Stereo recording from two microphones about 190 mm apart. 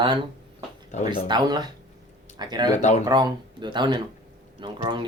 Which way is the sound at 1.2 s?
20° right (ahead or behind).